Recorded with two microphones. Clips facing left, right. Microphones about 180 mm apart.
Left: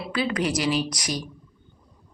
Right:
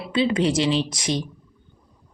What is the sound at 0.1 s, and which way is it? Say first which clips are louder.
A woman's voice: right 5 dB; 25° right (ahead or behind).